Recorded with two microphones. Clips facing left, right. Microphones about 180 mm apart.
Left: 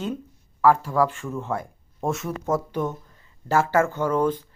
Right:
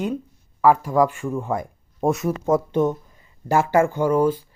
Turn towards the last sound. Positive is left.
turn(degrees=-10)  # may be behind; listen again after turning